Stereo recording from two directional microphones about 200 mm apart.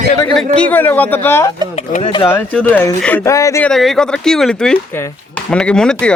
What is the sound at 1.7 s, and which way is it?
Speech, 30° left (ahead or behind).